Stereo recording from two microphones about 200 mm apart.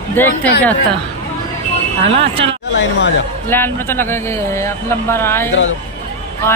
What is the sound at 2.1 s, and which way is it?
Speech, 25° right (ahead or behind).